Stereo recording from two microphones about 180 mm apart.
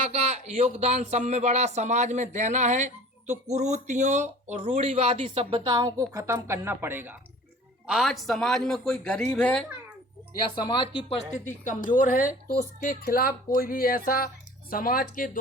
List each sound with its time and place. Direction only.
0.1 s speech: 35° right (ahead or behind); by 7.2 s 10° right (ahead or behind)
7.9 s speech: centre (ahead or behind)
10.5 s speech: 25° left (ahead or behind)
11.4 s a woman's voice: 45° left (ahead or behind)